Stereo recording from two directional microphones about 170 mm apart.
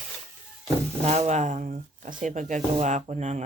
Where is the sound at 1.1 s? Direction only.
40° right (ahead or behind).